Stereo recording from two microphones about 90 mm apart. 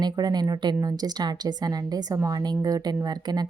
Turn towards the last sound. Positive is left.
turn(degrees=-50)  # may be behind; listen again after turning